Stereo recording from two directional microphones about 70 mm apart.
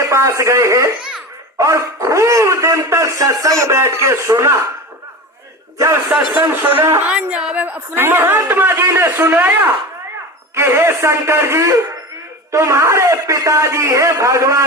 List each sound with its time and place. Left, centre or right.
0.0 s speech: right
5.7 s a man's voice: right
6.5 s a man's voice: right
7.0 s a woman's voice: centre
7.9 s a man's voice: right